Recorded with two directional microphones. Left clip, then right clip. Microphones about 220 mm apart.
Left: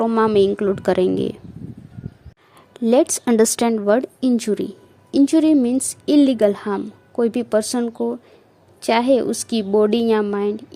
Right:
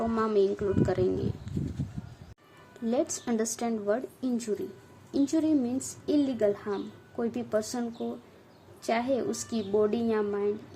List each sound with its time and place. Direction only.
0.0 s a woman's voice: 35° left (ahead or behind)
2.7 s a woman's voice: 45° left (ahead or behind)